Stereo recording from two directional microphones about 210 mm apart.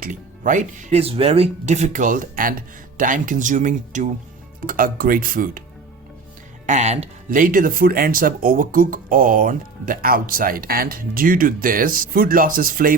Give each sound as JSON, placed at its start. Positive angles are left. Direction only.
{"t": 0.0, "sound": "speech", "side_deg": -40}
{"t": 6.7, "sound": "speech", "side_deg": -35}